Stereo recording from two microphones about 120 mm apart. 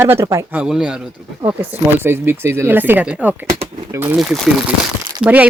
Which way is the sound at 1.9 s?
20° right (ahead or behind).